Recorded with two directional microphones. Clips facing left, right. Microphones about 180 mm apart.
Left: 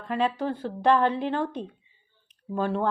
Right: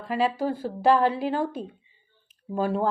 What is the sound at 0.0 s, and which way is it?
A woman's voice, 5° right (ahead or behind).